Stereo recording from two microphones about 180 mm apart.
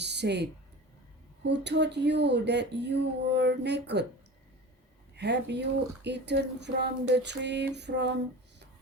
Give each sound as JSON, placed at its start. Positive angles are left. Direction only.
{"t": 0.0, "sound": "a sound", "side_deg": -70}
{"t": 1.5, "sound": "speech", "side_deg": -70}
{"t": 5.1, "sound": "speech", "side_deg": -70}